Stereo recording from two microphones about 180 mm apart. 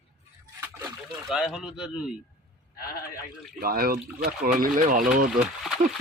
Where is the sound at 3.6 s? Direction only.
55° right (ahead or behind).